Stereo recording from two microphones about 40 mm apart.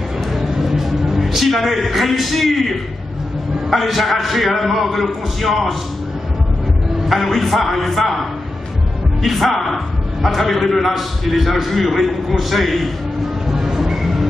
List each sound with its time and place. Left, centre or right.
0.3 s a sound: centre
3.7 s a man's voice: centre
7.1 s a man's voice: centre
13.5 s music: centre